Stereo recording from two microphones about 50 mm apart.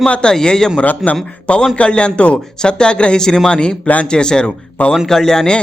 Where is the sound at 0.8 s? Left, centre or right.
Left.